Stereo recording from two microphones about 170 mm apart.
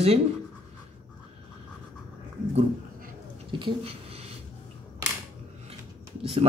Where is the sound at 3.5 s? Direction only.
30° right (ahead or behind).